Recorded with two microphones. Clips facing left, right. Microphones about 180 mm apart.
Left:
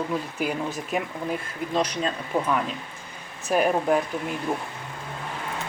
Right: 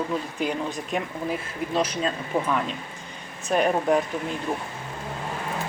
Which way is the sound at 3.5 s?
5° left (ahead or behind).